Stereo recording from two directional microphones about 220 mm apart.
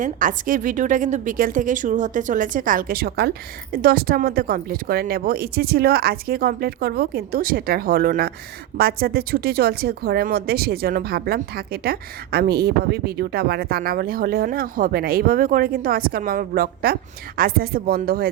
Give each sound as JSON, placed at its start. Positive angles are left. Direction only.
{"t": 0.0, "sound": "a woman's voice", "side_deg": -40}